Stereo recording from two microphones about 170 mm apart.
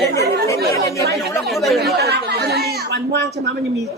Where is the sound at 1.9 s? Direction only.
75° right (ahead or behind).